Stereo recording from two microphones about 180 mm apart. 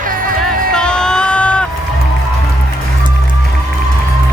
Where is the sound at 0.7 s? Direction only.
5° left (ahead or behind).